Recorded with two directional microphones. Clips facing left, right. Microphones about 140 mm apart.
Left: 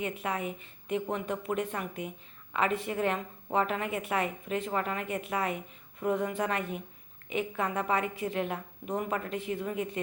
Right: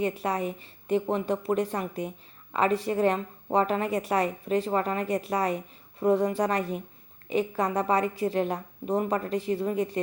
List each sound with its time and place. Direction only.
0.0 s a woman's voice: 35° right (ahead or behind)